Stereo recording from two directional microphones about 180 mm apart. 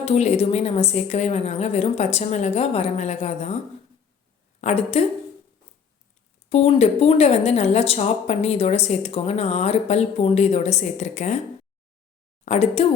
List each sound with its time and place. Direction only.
0.0 s speech: 35° left (ahead or behind)
4.6 s speech: 35° left (ahead or behind)
6.5 s speech: 35° left (ahead or behind)
12.5 s speech: 35° left (ahead or behind)